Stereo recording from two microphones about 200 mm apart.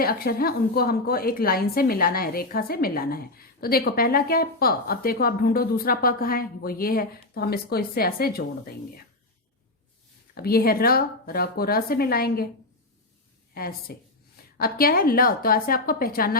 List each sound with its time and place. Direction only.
0.0 s a woman's voice: 50° left (ahead or behind)
10.3 s a woman's voice: 50° left (ahead or behind)
13.5 s a woman's voice: 50° left (ahead or behind)